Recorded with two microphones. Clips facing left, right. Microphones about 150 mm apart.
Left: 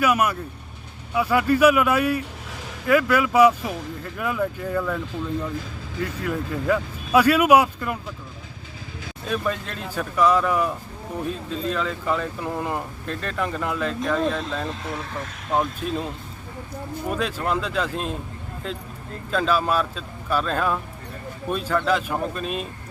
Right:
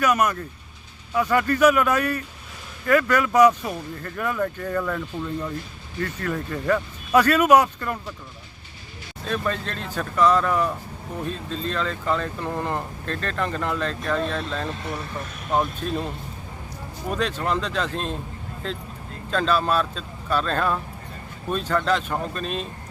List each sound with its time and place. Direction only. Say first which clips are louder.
0.0 s speech: even; 10° left (ahead or behind)
9.2 s speech: even; 10° left (ahead or behind)
14.8 s speech: even; 90° left
15.8 s speech: even; 5° left (ahead or behind)
17.1 s speech: right 1 dB; 10° left (ahead or behind)
19.3 s speech: even; 10° left (ahead or behind)